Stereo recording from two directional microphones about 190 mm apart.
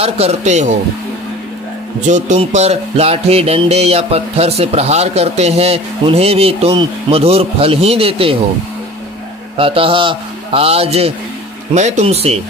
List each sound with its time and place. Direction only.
0.0 s music: 35° right (ahead or behind)
2.0 s music: 40° right (ahead or behind)
9.6 s a man's voice: 30° right (ahead or behind)
11.7 s music: 35° right (ahead or behind)